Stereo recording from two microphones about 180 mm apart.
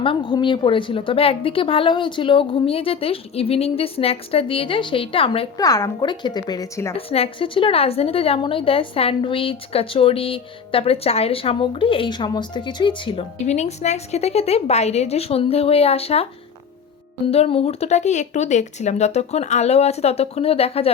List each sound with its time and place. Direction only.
0.0 s a woman's voice: 30° left (ahead or behind)
5.5 s a woman's voice: 20° left (ahead or behind)
6.9 s a woman's voice: 35° left (ahead or behind)
13.4 s a woman's voice: 40° left (ahead or behind)
17.3 s a woman's voice: 35° left (ahead or behind)